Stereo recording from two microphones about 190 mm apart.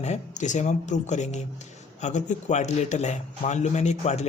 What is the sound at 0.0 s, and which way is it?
Speech, 40° left (ahead or behind).